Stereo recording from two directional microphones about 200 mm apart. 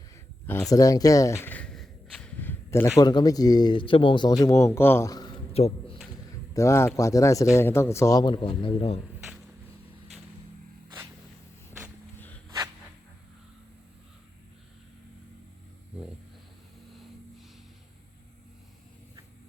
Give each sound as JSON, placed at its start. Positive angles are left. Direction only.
{"t": 0.4, "sound": "a sound", "side_deg": 10}
{"t": 3.0, "sound": "speech", "side_deg": 20}
{"t": 6.5, "sound": "speech", "side_deg": 15}